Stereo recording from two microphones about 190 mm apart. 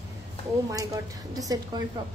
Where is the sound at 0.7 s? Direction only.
20° right (ahead or behind).